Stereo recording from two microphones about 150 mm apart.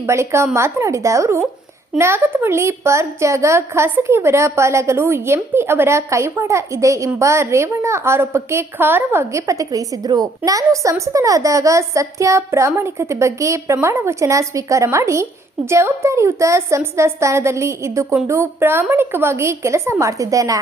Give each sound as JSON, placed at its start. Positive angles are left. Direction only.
{"t": 0.1, "sound": "a woman's voice", "side_deg": -20}